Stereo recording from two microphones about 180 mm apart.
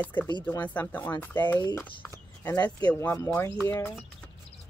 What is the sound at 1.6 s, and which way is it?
Speech, 25° left (ahead or behind).